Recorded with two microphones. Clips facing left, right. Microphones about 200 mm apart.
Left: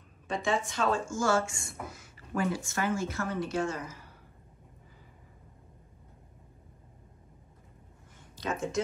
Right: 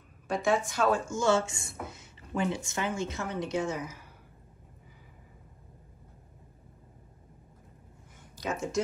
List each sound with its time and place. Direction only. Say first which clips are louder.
0.3 s a woman's voice: right 3 dB; 5° right (ahead or behind)
1.0 s speech: right 2 dB; 20° right (ahead or behind)
1.5 s a woman's voice: even; centre (ahead or behind)
1.9 s speech: even; 20° right (ahead or behind)
8.5 s a woman's voice: right 1 dB; centre (ahead or behind)